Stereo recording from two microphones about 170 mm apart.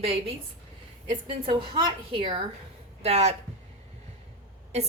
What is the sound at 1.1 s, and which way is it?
A woman's voice, 30° right (ahead or behind).